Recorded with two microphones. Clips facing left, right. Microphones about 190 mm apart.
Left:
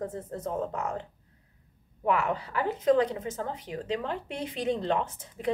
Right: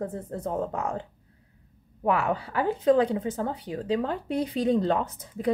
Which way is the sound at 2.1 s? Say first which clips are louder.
Right 2 dB; 30° right (ahead or behind).